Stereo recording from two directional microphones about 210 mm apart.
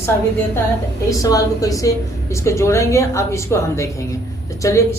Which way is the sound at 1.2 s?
15° left (ahead or behind).